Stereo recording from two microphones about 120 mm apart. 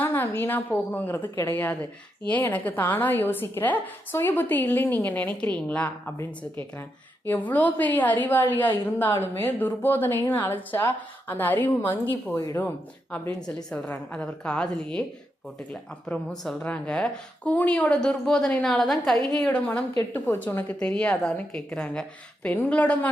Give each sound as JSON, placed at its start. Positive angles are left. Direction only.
{"t": 0.0, "sound": "a woman's voice", "side_deg": 15}
{"t": 7.3, "sound": "a woman's voice", "side_deg": 15}